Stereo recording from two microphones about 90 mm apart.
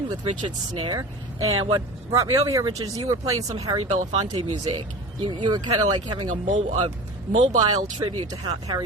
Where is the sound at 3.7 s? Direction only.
80° right.